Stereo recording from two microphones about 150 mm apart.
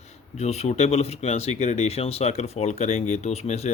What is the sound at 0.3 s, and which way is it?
Speech, 45° left (ahead or behind).